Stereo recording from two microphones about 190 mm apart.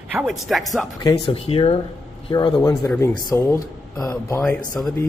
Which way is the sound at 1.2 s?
30° left (ahead or behind).